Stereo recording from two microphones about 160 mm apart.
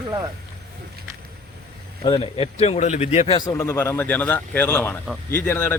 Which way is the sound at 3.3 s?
20° left (ahead or behind).